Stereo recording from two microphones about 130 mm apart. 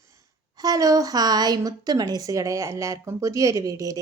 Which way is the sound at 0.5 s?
30° right (ahead or behind).